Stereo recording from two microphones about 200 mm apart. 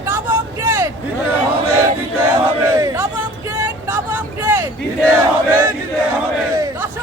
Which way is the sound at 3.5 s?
10° right (ahead or behind).